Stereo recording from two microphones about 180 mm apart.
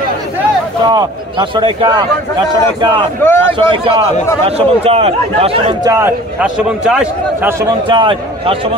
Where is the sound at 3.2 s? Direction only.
10° left (ahead or behind).